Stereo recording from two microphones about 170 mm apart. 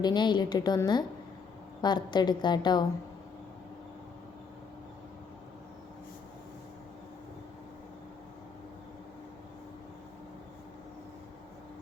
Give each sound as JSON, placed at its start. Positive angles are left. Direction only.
{"t": 0.0, "sound": "a woman's voice", "side_deg": 25}